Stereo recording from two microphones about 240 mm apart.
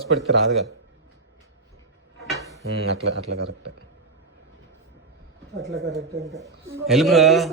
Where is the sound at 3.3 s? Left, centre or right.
Right.